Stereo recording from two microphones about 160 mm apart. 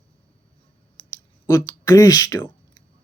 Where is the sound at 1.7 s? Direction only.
20° left (ahead or behind).